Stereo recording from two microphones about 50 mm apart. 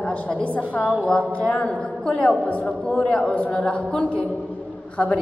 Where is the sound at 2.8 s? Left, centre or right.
Centre.